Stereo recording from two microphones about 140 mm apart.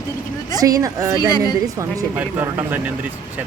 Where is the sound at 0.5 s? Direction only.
25° right (ahead or behind).